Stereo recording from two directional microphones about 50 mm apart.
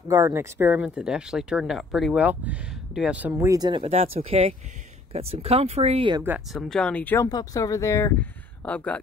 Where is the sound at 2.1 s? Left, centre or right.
Right.